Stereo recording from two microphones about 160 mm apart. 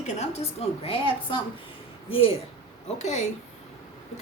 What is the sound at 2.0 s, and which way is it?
Speech, 35° left (ahead or behind).